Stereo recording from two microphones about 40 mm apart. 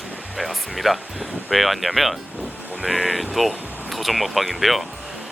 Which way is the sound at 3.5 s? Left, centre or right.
Right.